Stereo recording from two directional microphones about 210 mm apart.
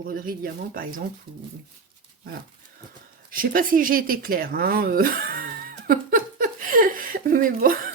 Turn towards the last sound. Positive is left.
turn(degrees=-40)  # may be behind; listen again after turning